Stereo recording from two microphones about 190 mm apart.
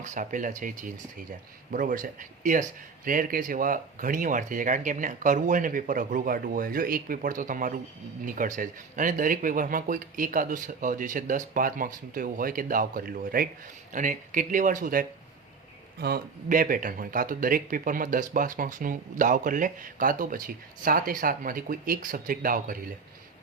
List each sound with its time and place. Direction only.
0.0 s speech: 40° right (ahead or behind)